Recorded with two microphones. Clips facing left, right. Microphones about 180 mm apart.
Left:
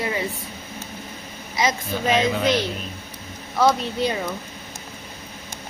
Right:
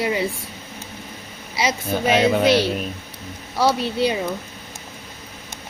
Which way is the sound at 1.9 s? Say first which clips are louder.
Right 4 dB; 55° right (ahead or behind).